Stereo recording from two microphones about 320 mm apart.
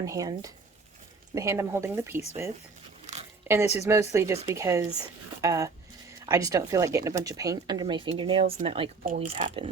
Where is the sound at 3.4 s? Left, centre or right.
Centre.